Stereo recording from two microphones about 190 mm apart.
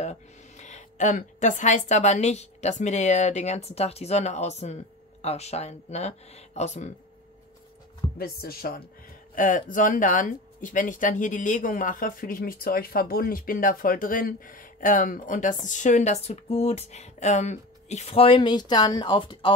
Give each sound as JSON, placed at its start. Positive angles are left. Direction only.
{"t": 0.0, "sound": "a woman's voice", "side_deg": 35}
{"t": 8.2, "sound": "speech", "side_deg": 50}